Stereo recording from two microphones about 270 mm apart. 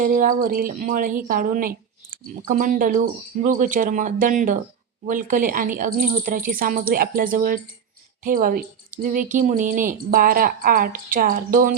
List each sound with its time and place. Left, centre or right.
0.0 s speech: right